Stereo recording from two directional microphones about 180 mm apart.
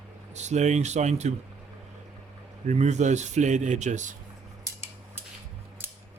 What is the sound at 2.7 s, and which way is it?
Speech, 40° right (ahead or behind).